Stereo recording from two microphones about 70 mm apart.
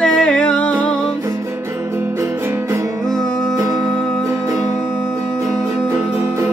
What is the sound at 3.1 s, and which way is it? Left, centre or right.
Music, centre.